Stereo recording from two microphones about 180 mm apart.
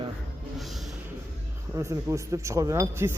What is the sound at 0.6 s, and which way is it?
Music, centre (ahead or behind).